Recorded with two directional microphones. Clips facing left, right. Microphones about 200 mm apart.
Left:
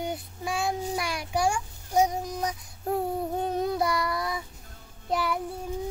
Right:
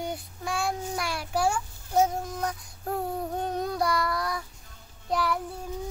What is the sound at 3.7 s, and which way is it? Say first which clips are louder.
Child singing: even; 5° left (ahead or behind).